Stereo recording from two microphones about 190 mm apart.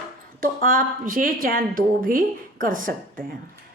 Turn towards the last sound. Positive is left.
turn(degrees=-45)  # may be behind; listen again after turning